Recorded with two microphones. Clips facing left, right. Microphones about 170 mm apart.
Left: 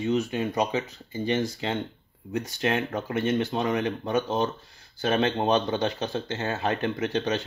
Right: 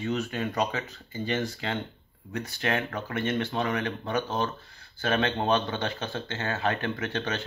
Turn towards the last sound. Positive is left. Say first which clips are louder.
# left 4 dB
turn(degrees=20)  # may be behind; listen again after turning